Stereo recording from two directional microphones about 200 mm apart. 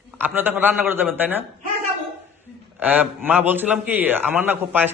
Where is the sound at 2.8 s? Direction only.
10° right (ahead or behind).